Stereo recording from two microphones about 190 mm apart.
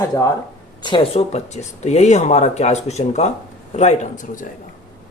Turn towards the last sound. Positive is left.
turn(degrees=40)  # may be behind; listen again after turning